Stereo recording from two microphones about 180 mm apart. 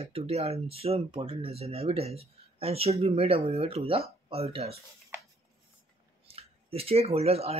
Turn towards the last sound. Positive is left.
turn(degrees=-35)  # may be behind; listen again after turning